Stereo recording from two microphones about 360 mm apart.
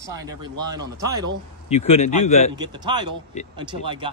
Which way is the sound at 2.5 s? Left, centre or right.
Centre.